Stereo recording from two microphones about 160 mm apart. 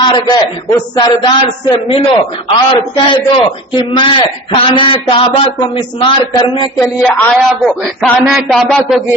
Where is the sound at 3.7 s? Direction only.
30° left (ahead or behind).